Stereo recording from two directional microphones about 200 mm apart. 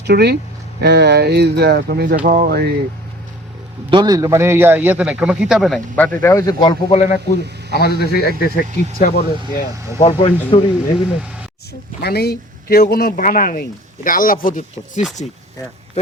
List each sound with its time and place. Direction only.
0.0 s speech: 55° right (ahead or behind)
3.8 s a man's voice: 20° right (ahead or behind); by 7.0 s 20° left (ahead or behind)
7.7 s speech: 55° left (ahead or behind)
10.0 s speech: 30° left (ahead or behind)
12.0 s speech: 50° left (ahead or behind)